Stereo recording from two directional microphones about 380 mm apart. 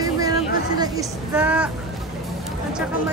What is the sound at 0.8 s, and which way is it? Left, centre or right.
Speech, centre.